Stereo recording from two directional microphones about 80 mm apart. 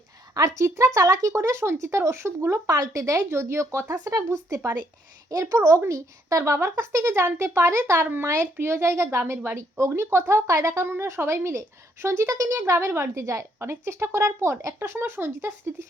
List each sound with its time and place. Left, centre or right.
0.3 s speech: right
2.6 s speech: right
3.2 s speech: right
3.9 s speech: right
4.3 s speech: right
14.8 s speech: right